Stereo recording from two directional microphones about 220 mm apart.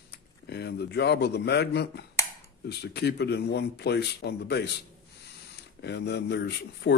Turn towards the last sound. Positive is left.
turn(degrees=50)  # may be behind; listen again after turning